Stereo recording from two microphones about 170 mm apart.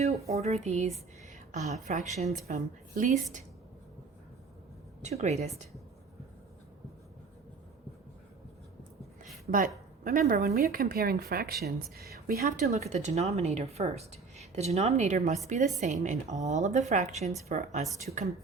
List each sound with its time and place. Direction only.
0.3 s a woman's voice: 40° right (ahead or behind)
5.0 s a woman's voice: 40° right (ahead or behind)
9.5 s a woman's voice: 55° right (ahead or behind)
10.5 s a woman's voice: 60° right (ahead or behind); by 17.8 s 45° right (ahead or behind)